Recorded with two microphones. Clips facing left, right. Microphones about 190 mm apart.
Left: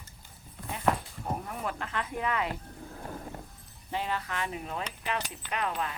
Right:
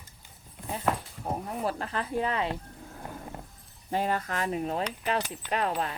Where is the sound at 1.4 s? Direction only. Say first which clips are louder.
Right 4 dB; 30° right (ahead or behind).